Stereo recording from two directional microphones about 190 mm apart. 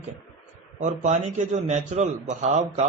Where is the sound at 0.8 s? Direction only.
40° right (ahead or behind).